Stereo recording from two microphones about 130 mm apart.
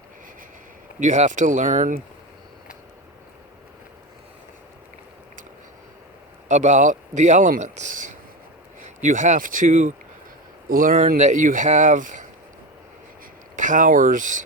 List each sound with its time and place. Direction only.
0.9 s speech: 65° right (ahead or behind); by 2.0 s 85° right
6.5 s speech: 65° right (ahead or behind)
10.7 s speech: 90° right
13.6 s speech: 80° right